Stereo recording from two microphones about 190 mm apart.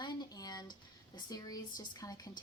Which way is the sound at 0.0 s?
20° left (ahead or behind).